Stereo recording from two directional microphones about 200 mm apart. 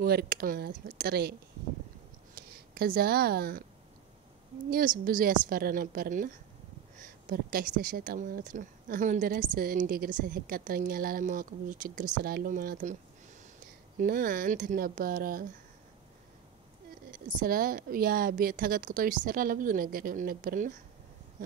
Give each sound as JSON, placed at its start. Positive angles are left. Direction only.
{"t": 0.0, "sound": "a woman's voice", "side_deg": -50}
{"t": 2.3, "sound": "speech", "side_deg": -50}
{"t": 4.6, "sound": "a woman's voice", "side_deg": -45}
{"t": 13.9, "sound": "a woman's voice", "side_deg": -45}
{"t": 17.4, "sound": "a woman's voice", "side_deg": -45}